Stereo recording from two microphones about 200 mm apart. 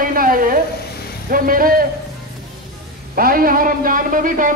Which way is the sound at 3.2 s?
45° right (ahead or behind).